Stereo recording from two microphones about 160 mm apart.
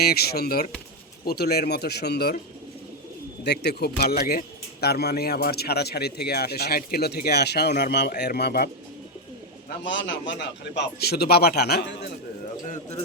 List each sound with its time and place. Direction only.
0.0 s speech: 75° left (ahead or behind)
3.4 s speech: 90° left
10.2 s speech: 90° left